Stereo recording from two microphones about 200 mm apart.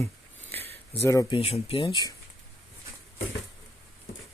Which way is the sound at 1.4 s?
30° left (ahead or behind).